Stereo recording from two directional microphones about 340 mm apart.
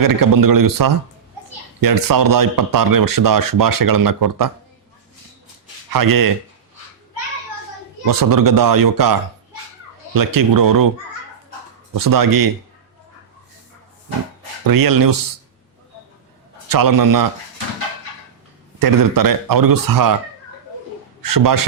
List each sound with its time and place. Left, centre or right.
0.0 s speech: right
5.9 s speech: right
8.0 s speech: right
10.2 s speech: right
11.9 s speech: right
14.6 s speech: right
16.6 s speech: right
18.8 s speech: right
21.2 s a man's voice: right